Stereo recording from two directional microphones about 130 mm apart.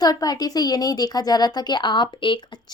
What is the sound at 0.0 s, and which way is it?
A woman's voice, 30° left (ahead or behind).